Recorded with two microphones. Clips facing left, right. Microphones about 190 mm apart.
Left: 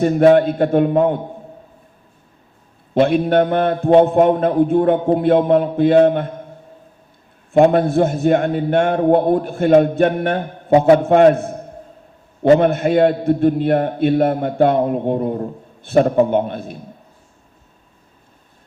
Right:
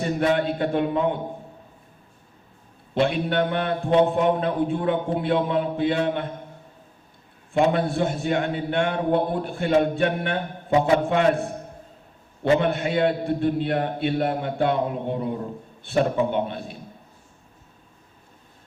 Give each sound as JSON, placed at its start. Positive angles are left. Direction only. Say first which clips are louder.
{"t": 0.0, "sound": "a man's voice", "louder": "left 10 dB", "side_deg": 45}
{"t": 2.9, "sound": "a man's voice", "louder": "left 8 dB", "side_deg": 45}
{"t": 7.5, "sound": "a man's voice", "louder": "left 8 dB", "side_deg": 45}